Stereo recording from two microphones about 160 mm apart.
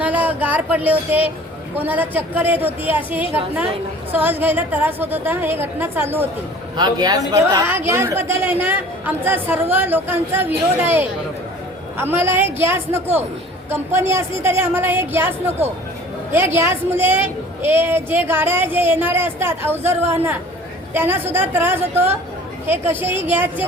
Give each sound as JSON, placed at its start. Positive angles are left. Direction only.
{"t": 0.0, "sound": "a sound", "side_deg": -10}
{"t": 1.7, "sound": "a woman's voice", "side_deg": -10}
{"t": 6.7, "sound": "a woman's voice", "side_deg": -25}